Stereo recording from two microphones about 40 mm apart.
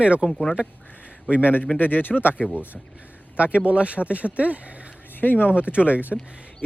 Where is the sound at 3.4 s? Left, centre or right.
Right.